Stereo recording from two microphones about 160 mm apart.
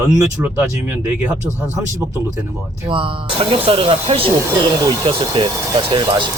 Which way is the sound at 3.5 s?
35° right (ahead or behind).